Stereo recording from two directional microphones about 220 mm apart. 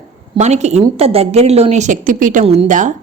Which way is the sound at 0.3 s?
30° right (ahead or behind).